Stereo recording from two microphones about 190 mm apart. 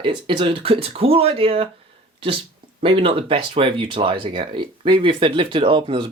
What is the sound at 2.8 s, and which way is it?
Speech, 30° right (ahead or behind).